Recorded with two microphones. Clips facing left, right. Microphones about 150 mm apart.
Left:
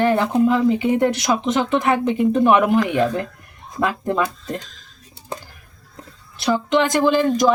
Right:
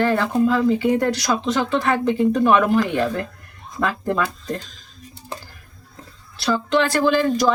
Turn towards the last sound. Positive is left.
turn(degrees=20)  # may be behind; listen again after turning